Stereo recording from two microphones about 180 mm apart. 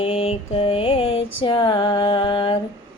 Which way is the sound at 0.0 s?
35° left (ahead or behind).